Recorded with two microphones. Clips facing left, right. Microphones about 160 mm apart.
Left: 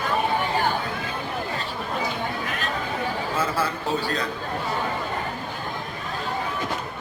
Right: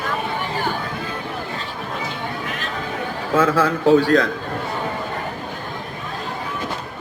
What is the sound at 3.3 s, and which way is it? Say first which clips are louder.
Speech: right 12 dB; 90° right.